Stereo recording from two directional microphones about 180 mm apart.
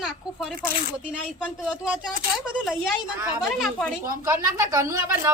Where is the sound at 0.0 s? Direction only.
5° right (ahead or behind).